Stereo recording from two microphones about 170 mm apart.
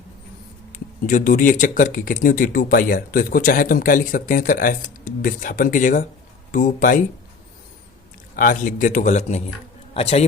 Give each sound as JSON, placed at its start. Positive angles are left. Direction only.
{"t": 0.7, "sound": "speech", "side_deg": 50}
{"t": 8.4, "sound": "speech", "side_deg": 55}